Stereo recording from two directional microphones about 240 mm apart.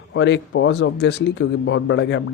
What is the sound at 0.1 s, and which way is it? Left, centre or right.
Speech, left.